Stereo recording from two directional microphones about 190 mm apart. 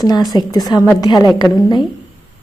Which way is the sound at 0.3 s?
20° left (ahead or behind).